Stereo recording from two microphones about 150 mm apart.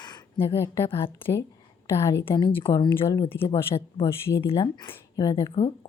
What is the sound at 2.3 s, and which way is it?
Speech, 35° left (ahead or behind).